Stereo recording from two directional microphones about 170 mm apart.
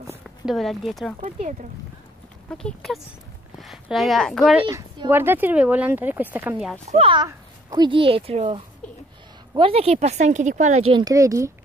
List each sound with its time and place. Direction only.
0.5 s speech: centre (ahead or behind)
1.2 s speech: 45° right (ahead or behind)
2.5 s speech: centre (ahead or behind)
4.6 s speech: 25° right (ahead or behind)
5.1 s speech: 10° right (ahead or behind)
6.9 s a child's voice: 35° right (ahead or behind); by 11.5 s 20° right (ahead or behind)